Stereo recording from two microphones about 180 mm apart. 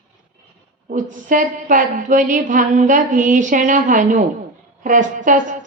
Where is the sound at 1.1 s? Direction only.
45° right (ahead or behind).